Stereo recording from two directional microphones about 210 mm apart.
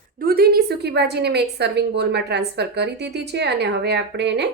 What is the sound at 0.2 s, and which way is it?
A woman's voice, 45° right (ahead or behind).